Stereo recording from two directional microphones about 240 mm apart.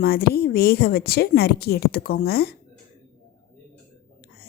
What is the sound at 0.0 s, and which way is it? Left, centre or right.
Speech, left.